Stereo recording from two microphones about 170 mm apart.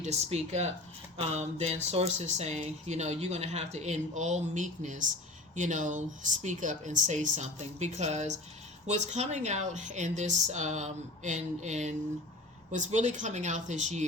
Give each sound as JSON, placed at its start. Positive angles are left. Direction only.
{"t": 0.0, "sound": "speech", "side_deg": -40}